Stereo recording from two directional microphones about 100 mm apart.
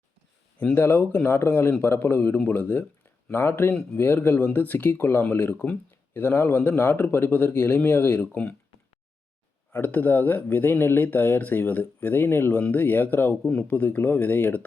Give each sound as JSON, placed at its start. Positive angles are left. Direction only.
{"t": 0.6, "sound": "speech", "side_deg": 20}
{"t": 9.7, "sound": "speech", "side_deg": 20}